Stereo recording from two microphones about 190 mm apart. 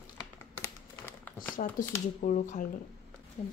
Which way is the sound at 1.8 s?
45° left (ahead or behind).